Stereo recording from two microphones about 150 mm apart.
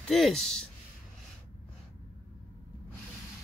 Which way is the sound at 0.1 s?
Centre (ahead or behind).